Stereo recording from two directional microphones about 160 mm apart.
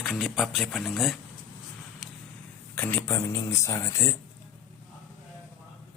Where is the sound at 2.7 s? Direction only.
10° left (ahead or behind).